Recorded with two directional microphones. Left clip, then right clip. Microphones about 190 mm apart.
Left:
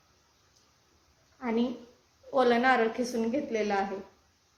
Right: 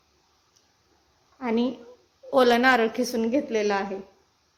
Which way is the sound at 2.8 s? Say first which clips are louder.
Right 4 dB; centre (ahead or behind).